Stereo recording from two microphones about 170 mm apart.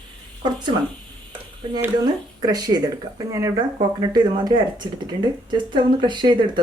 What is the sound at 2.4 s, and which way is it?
Speech, 20° right (ahead or behind).